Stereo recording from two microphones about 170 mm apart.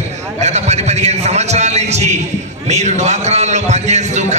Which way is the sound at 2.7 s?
40° right (ahead or behind).